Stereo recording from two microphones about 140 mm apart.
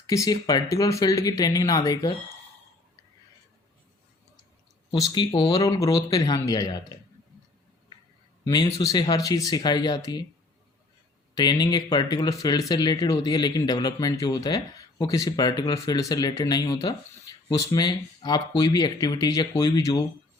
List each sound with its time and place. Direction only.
0.1 s speech: 25° left (ahead or behind)
4.9 s speech: 25° left (ahead or behind)
8.4 s speech: 25° left (ahead or behind)
11.3 s speech: 30° left (ahead or behind)